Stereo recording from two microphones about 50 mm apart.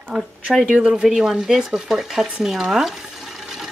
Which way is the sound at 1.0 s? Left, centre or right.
Centre.